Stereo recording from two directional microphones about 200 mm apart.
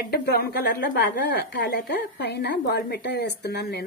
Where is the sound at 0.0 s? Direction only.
50° left (ahead or behind).